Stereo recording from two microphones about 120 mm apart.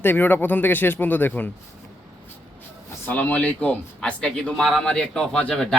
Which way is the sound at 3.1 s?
15° left (ahead or behind).